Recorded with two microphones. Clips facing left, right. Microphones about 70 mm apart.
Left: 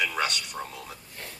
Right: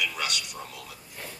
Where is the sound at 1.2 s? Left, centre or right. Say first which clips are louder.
Right 2 dB; centre.